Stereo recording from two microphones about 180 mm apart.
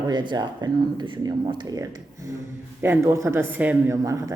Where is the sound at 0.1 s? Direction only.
25° right (ahead or behind).